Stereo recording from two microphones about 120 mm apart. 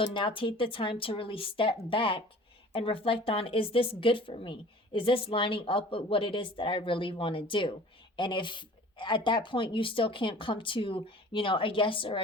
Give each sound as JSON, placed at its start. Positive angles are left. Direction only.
{"t": 0.0, "sound": "speech", "side_deg": 45}